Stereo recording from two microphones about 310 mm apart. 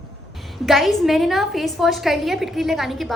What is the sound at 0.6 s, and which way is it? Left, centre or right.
A woman's voice, centre.